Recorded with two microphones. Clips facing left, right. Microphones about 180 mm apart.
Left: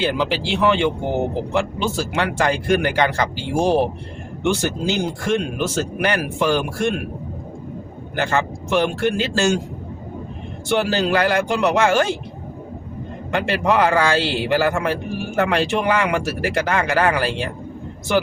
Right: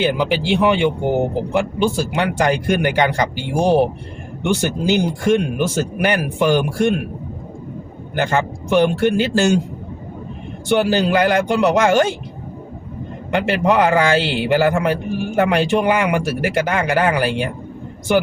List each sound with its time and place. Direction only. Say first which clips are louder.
0.0 s speech: right 3 dB; 15° right (ahead or behind)
8.1 s speech: right 2 dB; 20° right (ahead or behind)
10.7 s speech: right 3 dB; 20° right (ahead or behind)
13.3 s speech: right 3 dB; 20° right (ahead or behind)